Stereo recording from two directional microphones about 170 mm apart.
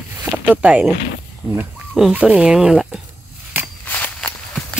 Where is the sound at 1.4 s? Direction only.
10° right (ahead or behind).